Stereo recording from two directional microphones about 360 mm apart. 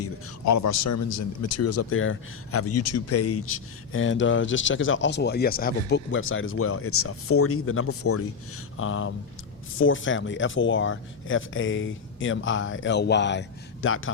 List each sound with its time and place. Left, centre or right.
0.0 s a man's voice: left